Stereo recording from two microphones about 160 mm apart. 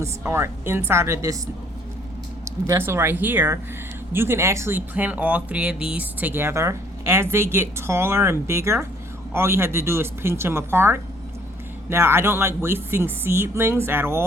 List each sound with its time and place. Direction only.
0.0 s speech: 15° right (ahead or behind)
2.4 s speech: 15° right (ahead or behind)